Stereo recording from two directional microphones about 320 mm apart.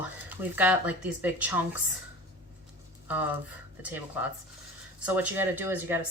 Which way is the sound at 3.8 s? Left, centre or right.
Centre.